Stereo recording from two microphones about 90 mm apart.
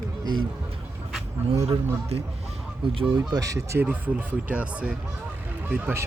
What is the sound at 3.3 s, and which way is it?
Speech, 40° right (ahead or behind).